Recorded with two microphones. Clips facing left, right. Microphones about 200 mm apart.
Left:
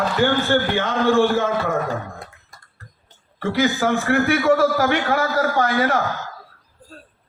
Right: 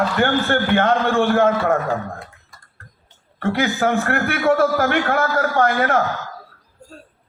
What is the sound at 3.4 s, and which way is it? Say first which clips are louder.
A man's voice: even; 55° right (ahead or behind).